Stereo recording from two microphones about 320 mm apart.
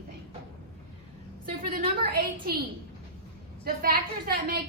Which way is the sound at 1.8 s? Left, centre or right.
Right.